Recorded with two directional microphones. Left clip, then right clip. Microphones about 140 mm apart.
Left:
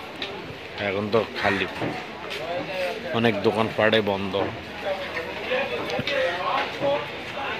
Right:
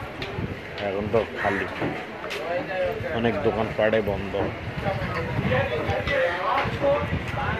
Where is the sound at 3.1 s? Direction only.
30° left (ahead or behind).